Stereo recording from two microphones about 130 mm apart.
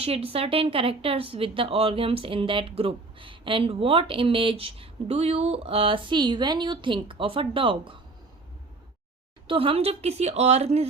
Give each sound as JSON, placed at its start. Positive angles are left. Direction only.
{"t": 0.0, "sound": "speech", "side_deg": -50}
{"t": 9.5, "sound": "a woman's voice", "side_deg": -45}